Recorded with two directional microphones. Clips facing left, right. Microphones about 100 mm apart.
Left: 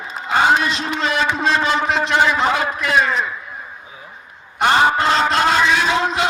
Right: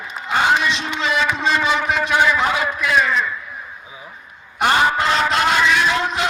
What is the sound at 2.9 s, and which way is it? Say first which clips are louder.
Speech: even; 35° left (ahead or behind).